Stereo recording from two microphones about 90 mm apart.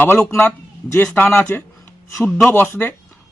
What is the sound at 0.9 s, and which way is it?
Speech, 20° left (ahead or behind).